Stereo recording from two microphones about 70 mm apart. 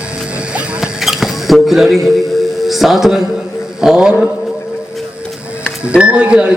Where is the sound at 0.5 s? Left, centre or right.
Centre.